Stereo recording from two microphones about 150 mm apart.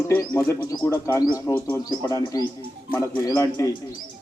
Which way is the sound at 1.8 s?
30° left (ahead or behind).